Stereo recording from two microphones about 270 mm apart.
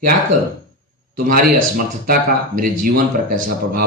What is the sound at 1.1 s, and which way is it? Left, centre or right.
Speech, right.